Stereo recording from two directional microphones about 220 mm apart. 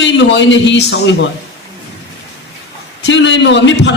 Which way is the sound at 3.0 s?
55° left (ahead or behind).